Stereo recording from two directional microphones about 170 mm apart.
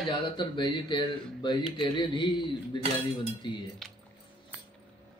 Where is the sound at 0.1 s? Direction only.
30° left (ahead or behind).